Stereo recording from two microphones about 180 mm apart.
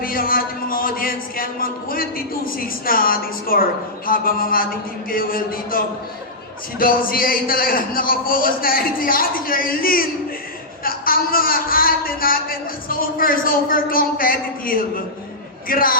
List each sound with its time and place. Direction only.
0.0 s a man's voice: 55° left (ahead or behind)